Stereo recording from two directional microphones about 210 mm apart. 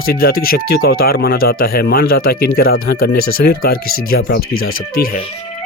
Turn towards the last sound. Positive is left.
turn(degrees=45)  # may be behind; listen again after turning